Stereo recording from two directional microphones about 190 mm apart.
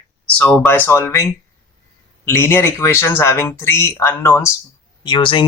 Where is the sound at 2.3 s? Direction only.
10° left (ahead or behind).